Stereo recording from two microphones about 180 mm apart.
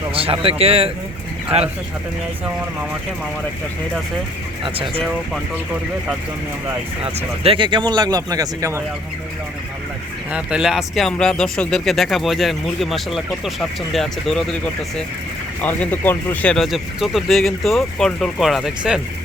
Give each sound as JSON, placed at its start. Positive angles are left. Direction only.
{"t": 0.1, "sound": "speech", "side_deg": -30}
{"t": 4.6, "sound": "speech", "side_deg": -30}
{"t": 7.0, "sound": "speech", "side_deg": -35}
{"t": 10.3, "sound": "speech", "side_deg": -5}